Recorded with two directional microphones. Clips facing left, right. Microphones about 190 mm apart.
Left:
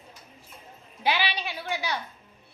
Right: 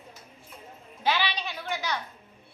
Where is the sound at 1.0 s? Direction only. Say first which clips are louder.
Left 1 dB; 10° left (ahead or behind).